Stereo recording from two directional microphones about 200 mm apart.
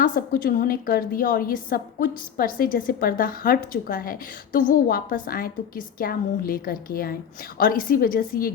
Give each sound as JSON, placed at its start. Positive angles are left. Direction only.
{"t": 0.0, "sound": "a woman's voice", "side_deg": 45}